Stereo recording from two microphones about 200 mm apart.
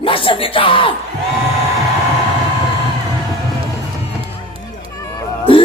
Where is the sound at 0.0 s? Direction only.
25° left (ahead or behind).